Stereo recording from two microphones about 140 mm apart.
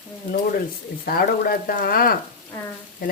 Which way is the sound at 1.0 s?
90° left.